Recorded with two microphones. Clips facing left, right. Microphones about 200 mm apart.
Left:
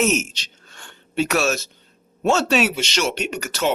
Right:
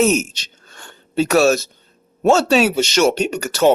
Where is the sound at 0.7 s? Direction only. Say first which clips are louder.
Right 6 dB; 40° right (ahead or behind).